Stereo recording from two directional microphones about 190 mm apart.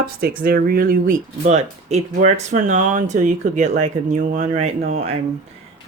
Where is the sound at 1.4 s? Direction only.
35° right (ahead or behind).